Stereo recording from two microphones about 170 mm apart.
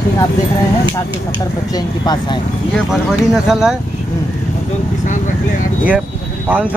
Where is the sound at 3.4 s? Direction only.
5° right (ahead or behind).